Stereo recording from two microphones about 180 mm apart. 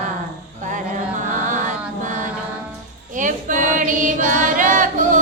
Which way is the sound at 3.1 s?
45° right (ahead or behind).